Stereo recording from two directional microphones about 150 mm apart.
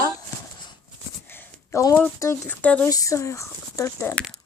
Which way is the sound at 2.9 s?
20° left (ahead or behind).